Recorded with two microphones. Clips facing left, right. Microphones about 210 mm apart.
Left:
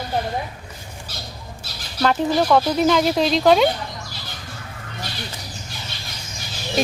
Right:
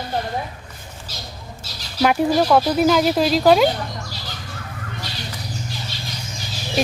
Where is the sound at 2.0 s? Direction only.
10° right (ahead or behind).